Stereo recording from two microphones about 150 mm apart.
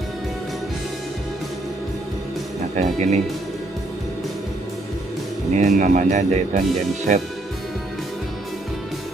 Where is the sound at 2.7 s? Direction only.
50° right (ahead or behind).